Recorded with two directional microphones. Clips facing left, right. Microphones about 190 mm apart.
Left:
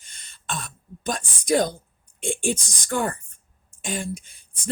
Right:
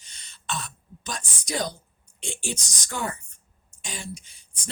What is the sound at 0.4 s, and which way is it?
Throat clearing, 50° left (ahead or behind).